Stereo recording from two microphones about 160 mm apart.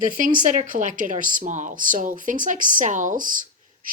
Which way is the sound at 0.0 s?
55° right (ahead or behind).